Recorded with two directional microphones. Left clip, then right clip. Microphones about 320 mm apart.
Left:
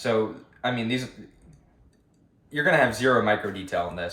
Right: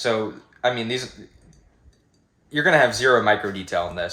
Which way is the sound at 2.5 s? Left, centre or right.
Right.